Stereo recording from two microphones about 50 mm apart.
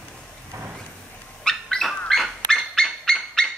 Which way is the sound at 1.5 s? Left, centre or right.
Centre.